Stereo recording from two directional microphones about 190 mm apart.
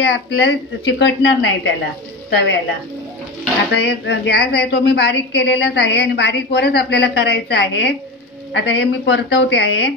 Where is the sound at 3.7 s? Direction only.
65° left (ahead or behind).